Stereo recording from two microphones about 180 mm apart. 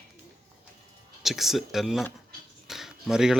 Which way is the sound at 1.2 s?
Centre (ahead or behind).